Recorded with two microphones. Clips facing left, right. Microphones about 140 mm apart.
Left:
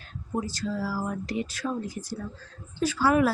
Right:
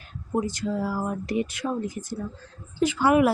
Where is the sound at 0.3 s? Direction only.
20° right (ahead or behind).